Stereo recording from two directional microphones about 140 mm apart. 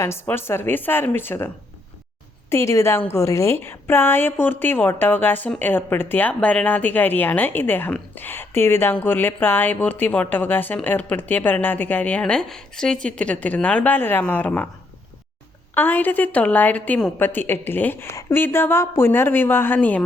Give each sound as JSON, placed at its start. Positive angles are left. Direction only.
{"t": 0.0, "sound": "a woman's voice", "side_deg": 15}
{"t": 15.7, "sound": "a woman's voice", "side_deg": 15}